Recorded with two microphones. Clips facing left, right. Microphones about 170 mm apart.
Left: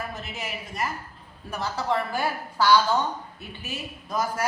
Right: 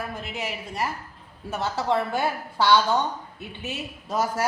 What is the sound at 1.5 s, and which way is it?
A woman's voice, 25° right (ahead or behind).